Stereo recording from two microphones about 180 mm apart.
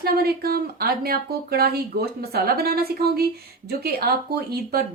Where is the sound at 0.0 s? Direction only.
60° right (ahead or behind).